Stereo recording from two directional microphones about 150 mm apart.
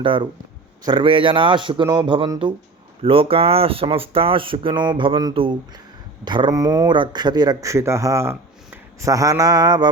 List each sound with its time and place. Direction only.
0.0 s speech: 35° right (ahead or behind)